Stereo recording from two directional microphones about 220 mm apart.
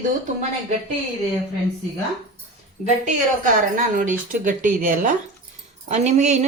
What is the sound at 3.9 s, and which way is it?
Speech, 35° right (ahead or behind).